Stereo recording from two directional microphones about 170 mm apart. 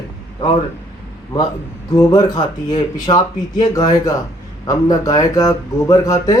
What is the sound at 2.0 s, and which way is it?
Speech, 25° left (ahead or behind).